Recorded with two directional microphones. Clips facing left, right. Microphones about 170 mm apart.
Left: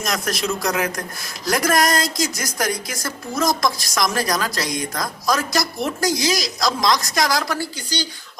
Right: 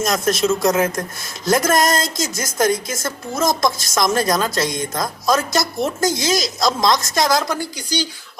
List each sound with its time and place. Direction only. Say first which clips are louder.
0.0 s speech: right 6 dB; 25° right (ahead or behind)